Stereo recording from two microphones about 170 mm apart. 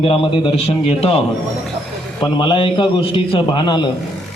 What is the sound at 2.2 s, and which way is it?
A man's voice, 25° left (ahead or behind).